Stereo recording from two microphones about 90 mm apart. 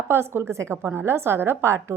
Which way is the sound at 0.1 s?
25° right (ahead or behind).